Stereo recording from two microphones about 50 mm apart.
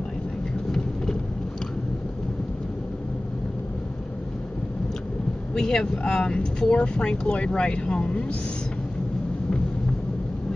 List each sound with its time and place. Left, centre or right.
5.5 s speech: centre